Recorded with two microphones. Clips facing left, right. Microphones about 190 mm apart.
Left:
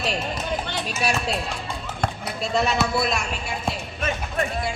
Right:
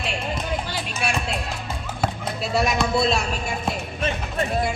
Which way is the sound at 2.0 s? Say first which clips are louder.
Right 2 dB; 5° right (ahead or behind).